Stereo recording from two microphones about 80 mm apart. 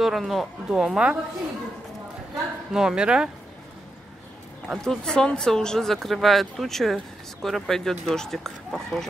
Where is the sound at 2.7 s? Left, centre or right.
Centre.